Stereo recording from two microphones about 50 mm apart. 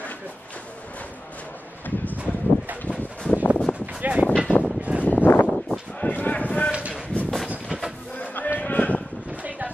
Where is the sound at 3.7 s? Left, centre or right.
Left.